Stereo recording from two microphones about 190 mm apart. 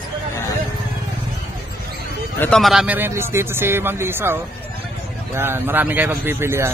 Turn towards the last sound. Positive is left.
turn(degrees=-15)  # may be behind; listen again after turning